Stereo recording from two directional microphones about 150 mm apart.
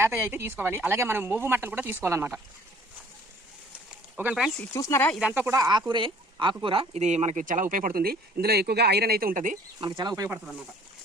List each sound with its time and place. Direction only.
0.0 s speech: 15° right (ahead or behind)
4.2 s speech: 5° right (ahead or behind)
4.7 s speech: 20° left (ahead or behind)
5.3 s speech: 15° right (ahead or behind)
5.5 s speech: 25° right (ahead or behind); by 9.6 s 60° right (ahead or behind)
9.8 s speech: 30° right (ahead or behind)